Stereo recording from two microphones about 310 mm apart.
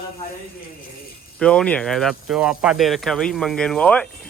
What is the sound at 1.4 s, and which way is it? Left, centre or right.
Speech, centre.